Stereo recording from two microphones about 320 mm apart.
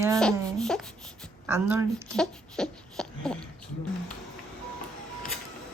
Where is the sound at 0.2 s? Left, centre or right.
Centre.